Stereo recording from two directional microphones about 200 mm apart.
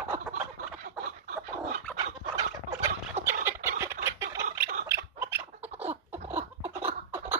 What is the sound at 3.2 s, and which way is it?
Fowl, 35° right (ahead or behind).